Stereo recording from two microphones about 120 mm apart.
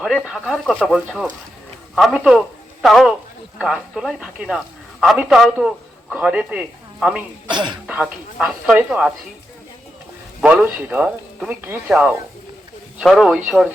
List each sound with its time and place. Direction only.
0.0 s speech: 5° right (ahead or behind)
7.5 s speech: 40° right (ahead or behind)
7.9 s speech: 10° right (ahead or behind)
10.4 s speech: 10° right (ahead or behind)